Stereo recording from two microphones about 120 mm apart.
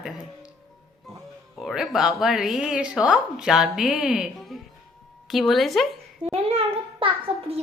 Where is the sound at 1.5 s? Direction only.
Centre (ahead or behind).